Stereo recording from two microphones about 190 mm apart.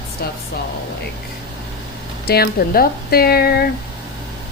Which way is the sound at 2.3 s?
55° left (ahead or behind).